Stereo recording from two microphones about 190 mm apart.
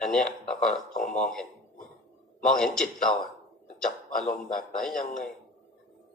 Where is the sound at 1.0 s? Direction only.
5° left (ahead or behind).